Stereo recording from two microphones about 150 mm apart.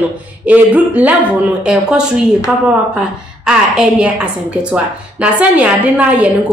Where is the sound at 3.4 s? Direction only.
5° right (ahead or behind).